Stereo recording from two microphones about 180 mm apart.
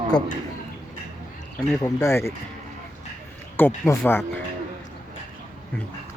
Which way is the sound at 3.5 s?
10° left (ahead or behind).